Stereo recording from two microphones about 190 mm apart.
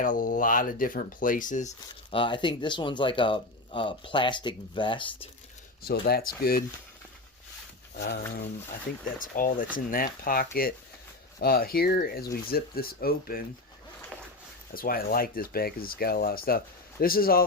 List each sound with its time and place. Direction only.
0.0 s speech: 45° left (ahead or behind)
2.0 s speech: 25° left (ahead or behind)
5.8 s speech: 55° left (ahead or behind)
7.9 s speech: 60° left (ahead or behind)
9.1 s speech: 45° left (ahead or behind)
14.7 s speech: 50° left (ahead or behind)